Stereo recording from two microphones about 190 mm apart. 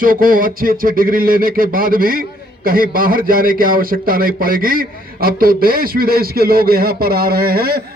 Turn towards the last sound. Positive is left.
turn(degrees=-55)  # may be behind; listen again after turning